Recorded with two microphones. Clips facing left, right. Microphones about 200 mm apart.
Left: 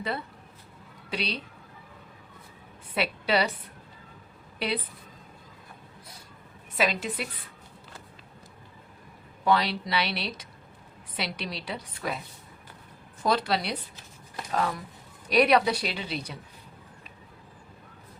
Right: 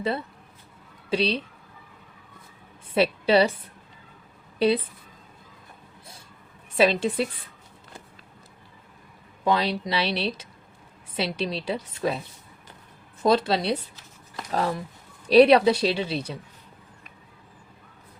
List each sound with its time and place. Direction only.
1.1 s speech: 25° right (ahead or behind)
2.9 s a woman's voice: 25° right (ahead or behind)
6.7 s speech: 30° right (ahead or behind)
9.4 s speech: 20° right (ahead or behind)
13.2 s speech: 25° right (ahead or behind)